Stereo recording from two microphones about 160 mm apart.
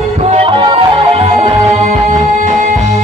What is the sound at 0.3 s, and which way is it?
Music, 30° right (ahead or behind).